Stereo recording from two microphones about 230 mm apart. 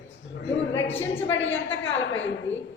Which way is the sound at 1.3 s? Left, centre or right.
Left.